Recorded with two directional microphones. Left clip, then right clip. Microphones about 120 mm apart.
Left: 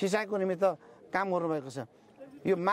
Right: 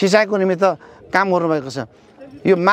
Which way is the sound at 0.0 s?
35° right (ahead or behind).